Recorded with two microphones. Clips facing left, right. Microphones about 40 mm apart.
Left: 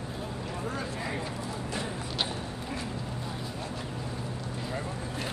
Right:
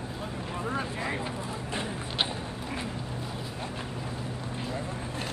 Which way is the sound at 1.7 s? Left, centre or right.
Right.